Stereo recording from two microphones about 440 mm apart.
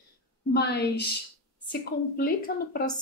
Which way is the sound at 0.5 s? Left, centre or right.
Left.